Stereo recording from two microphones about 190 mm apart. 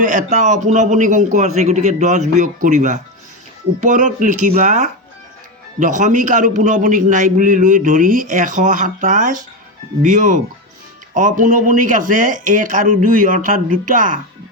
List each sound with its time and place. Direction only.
0.0 s a man's voice: 45° right (ahead or behind)